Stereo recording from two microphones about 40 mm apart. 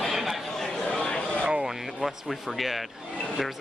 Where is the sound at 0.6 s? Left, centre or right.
Centre.